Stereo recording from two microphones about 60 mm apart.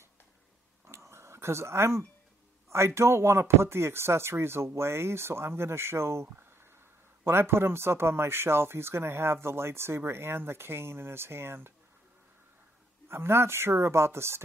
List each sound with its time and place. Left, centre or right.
0.8 s a sound: right
2.7 s speech: right
13.1 s speech: right